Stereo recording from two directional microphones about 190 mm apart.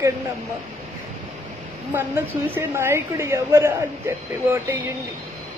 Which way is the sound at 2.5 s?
10° right (ahead or behind).